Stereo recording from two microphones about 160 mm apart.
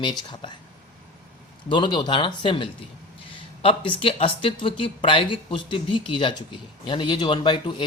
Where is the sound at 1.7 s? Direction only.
30° left (ahead or behind).